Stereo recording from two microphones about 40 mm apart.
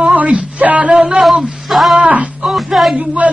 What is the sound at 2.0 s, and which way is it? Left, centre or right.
Speech, right.